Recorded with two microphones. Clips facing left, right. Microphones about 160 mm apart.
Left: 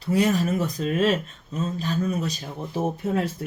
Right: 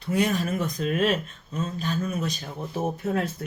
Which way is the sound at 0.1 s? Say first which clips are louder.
Left 3 dB; 35° left (ahead or behind).